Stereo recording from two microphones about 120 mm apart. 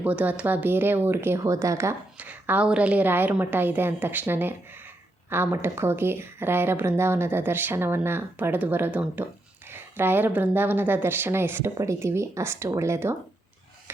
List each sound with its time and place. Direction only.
0.0 s a woman's voice: 15° right (ahead or behind)
2.1 s a woman's voice: 15° right (ahead or behind)